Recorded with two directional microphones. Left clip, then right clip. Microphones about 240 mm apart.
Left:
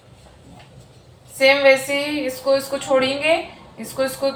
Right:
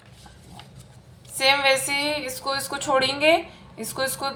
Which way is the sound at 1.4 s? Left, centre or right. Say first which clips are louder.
Left 6 dB; right.